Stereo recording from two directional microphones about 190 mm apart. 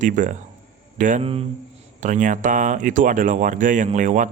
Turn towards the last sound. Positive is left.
turn(degrees=-40)  # may be behind; listen again after turning